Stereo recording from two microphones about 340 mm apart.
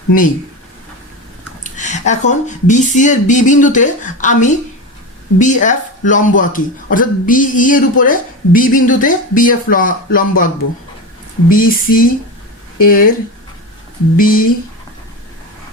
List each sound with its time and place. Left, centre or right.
1.6 s speech: left
14.2 s speech: left